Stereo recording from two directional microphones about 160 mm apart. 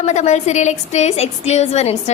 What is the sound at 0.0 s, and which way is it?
A woman's voice, 45° left (ahead or behind).